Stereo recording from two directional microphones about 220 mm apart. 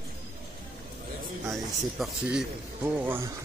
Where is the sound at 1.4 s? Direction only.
Centre (ahead or behind).